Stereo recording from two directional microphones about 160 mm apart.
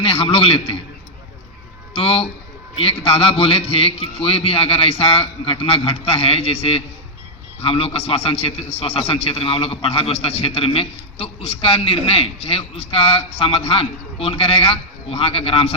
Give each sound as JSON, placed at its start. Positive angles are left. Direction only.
{"t": 0.0, "sound": "a man's voice", "side_deg": 35}
{"t": 1.9, "sound": "a man's voice", "side_deg": 35}